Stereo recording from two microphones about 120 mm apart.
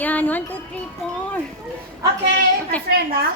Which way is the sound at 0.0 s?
15° left (ahead or behind).